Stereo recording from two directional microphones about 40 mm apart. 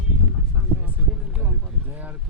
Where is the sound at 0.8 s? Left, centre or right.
Right.